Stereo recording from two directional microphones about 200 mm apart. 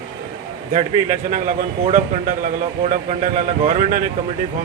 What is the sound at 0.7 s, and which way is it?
A man's voice, 40° right (ahead or behind).